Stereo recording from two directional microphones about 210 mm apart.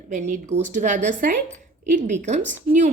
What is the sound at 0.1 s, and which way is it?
A woman's voice, 35° right (ahead or behind).